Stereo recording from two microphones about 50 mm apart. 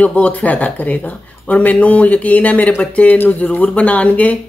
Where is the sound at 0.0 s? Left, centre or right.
Left.